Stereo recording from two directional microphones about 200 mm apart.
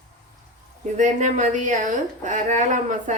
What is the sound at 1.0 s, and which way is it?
A woman's voice, 40° right (ahead or behind).